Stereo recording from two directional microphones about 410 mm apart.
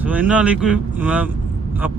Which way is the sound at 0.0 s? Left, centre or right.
Centre.